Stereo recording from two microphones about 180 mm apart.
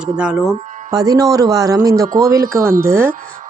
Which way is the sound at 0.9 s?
20° right (ahead or behind).